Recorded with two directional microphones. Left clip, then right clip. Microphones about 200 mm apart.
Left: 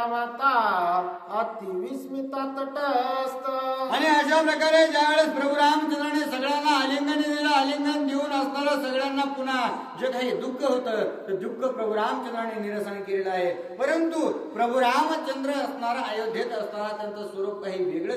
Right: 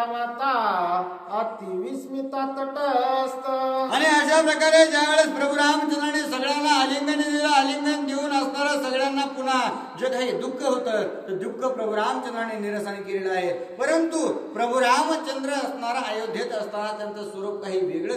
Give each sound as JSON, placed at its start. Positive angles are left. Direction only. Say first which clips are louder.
{"t": 0.1, "sound": "music", "louder": "left 1 dB", "side_deg": 20}
{"t": 2.3, "sound": "music", "louder": "right 3 dB", "side_deg": 20}
{"t": 3.9, "sound": "a man's voice", "louder": "right 2 dB", "side_deg": -10}
{"t": 13.3, "sound": "a man's voice", "louder": "right 1 dB", "side_deg": -15}